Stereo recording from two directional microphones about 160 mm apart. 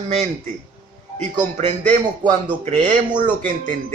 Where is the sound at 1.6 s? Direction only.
50° right (ahead or behind).